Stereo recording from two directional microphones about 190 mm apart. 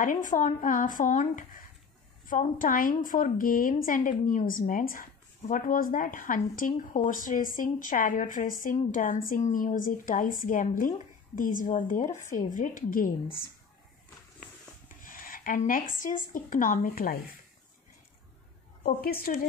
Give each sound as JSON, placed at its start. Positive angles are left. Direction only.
{"t": 0.0, "sound": "a woman's voice", "side_deg": 45}
{"t": 15.0, "sound": "speech", "side_deg": 50}
{"t": 18.8, "sound": "a woman's voice", "side_deg": 50}